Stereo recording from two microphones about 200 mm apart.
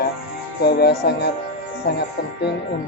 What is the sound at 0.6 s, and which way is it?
Speech, 55° left (ahead or behind).